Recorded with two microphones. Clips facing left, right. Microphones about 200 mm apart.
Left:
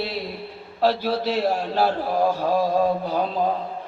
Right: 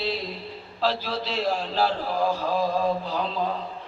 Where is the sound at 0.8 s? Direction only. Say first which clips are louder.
Left 6 dB; 55° left (ahead or behind).